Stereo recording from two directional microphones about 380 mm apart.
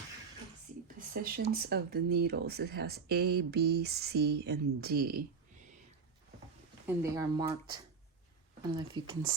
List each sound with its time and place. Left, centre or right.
0.9 s speech: right
6.8 s speech: centre
9.0 s speech: centre